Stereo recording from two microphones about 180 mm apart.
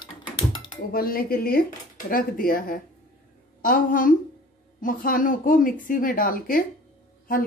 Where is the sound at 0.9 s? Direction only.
55° left (ahead or behind).